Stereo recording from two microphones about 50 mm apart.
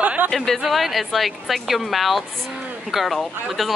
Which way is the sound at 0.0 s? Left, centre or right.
Right.